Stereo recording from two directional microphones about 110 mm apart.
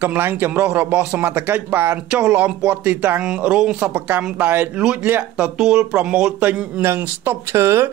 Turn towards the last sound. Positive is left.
turn(degrees=-25)  # may be behind; listen again after turning